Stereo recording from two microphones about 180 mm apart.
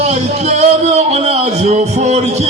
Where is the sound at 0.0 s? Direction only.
40° right (ahead or behind).